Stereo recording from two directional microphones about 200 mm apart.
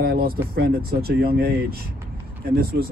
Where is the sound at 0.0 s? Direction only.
50° right (ahead or behind).